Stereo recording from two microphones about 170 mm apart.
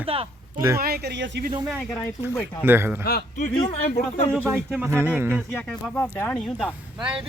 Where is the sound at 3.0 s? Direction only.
65° left (ahead or behind).